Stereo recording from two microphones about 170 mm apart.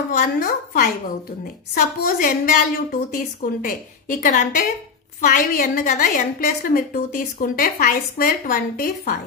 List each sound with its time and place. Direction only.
0.2 s a woman's voice: 55° left (ahead or behind)